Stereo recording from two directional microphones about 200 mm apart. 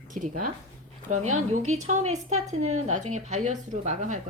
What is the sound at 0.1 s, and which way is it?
Speech, 40° right (ahead or behind).